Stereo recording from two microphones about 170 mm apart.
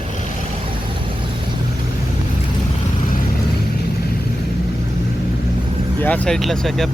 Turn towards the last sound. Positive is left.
turn(degrees=0)  # may be behind; listen again after turning